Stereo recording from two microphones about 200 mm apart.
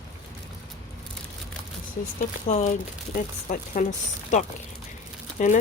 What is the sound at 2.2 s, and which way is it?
Speech, 35° left (ahead or behind).